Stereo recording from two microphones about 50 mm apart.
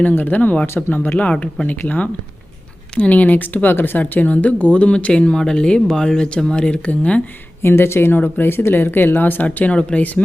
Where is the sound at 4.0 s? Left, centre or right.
Left.